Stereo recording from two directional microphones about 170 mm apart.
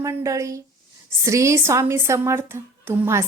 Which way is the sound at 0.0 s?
15° right (ahead or behind).